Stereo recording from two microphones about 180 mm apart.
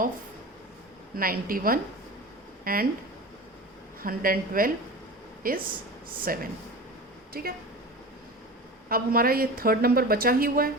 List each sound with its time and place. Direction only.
1.1 s a woman's voice: 55° right (ahead or behind)
4.0 s a woman's voice: 50° right (ahead or behind)
8.9 s a woman's voice: 55° right (ahead or behind)